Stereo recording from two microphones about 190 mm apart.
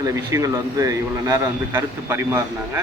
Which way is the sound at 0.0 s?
15° right (ahead or behind).